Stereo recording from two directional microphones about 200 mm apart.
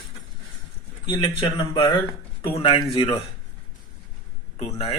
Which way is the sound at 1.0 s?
25° left (ahead or behind).